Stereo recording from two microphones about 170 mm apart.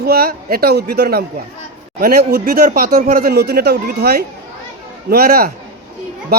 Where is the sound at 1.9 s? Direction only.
60° right (ahead or behind).